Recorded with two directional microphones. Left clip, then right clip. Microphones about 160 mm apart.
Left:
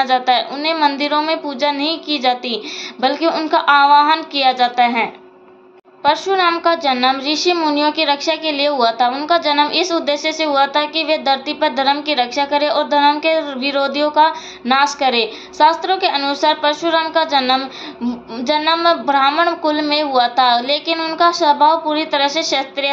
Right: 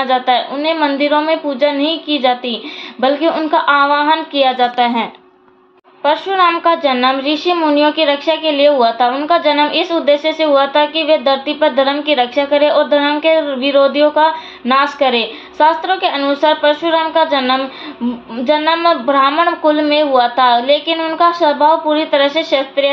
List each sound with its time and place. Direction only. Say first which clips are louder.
0.0 s a woman's voice: right 1 dB; 40° right (ahead or behind); by 5.0 s 60° right (ahead or behind)
6.0 s a woman's voice: right 2 dB; 35° right (ahead or behind)